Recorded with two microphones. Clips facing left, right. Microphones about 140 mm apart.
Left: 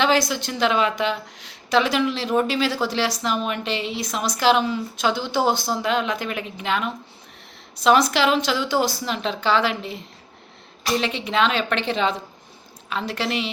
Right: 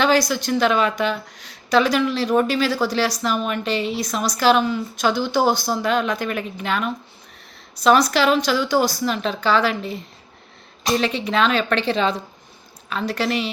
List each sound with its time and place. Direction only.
0.0 s a woman's voice: 25° left (ahead or behind)